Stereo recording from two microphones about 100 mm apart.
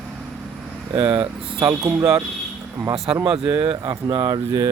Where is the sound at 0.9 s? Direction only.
55° right (ahead or behind).